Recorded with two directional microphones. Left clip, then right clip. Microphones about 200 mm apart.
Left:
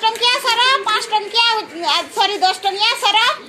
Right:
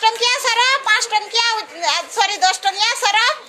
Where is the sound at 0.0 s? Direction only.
30° right (ahead or behind).